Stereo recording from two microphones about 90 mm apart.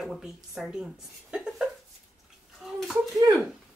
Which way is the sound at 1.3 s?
10° right (ahead or behind).